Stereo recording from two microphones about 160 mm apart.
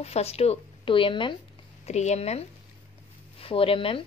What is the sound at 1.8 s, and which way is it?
Speech, 45° left (ahead or behind).